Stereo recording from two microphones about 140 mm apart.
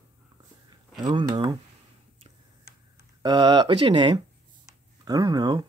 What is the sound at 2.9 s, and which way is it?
Speech, 30° right (ahead or behind).